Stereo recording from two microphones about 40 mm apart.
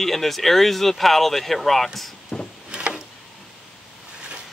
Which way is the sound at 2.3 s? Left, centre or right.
Left.